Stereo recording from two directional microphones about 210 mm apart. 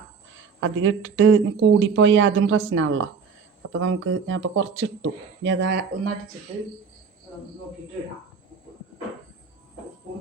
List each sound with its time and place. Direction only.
0.6 s speech: 65° right (ahead or behind)
6.5 s speech: 30° right (ahead or behind)